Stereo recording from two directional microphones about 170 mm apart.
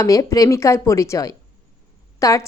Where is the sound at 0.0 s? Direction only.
20° left (ahead or behind).